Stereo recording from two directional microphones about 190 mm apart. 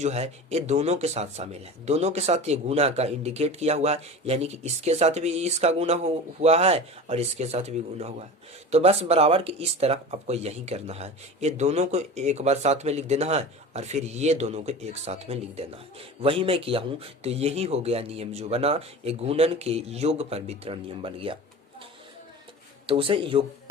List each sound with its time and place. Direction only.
0.0 s speech: 35° right (ahead or behind)
22.9 s speech: 25° right (ahead or behind)